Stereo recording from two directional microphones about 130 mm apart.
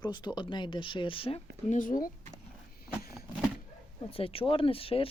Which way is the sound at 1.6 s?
80° left.